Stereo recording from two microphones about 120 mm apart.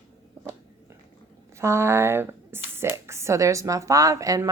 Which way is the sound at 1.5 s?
20° right (ahead or behind).